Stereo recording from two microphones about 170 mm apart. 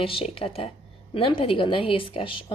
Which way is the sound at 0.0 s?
35° left (ahead or behind).